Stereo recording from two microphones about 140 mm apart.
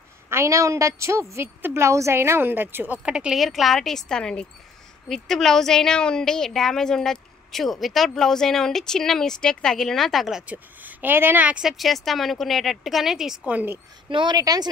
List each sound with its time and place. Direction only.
0.3 s a woman's voice: 20° right (ahead or behind)
14.0 s a woman's voice: 35° right (ahead or behind)